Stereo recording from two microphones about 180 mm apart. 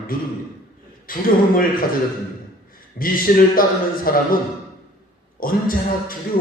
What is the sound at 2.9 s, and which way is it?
Speech, 50° left (ahead or behind).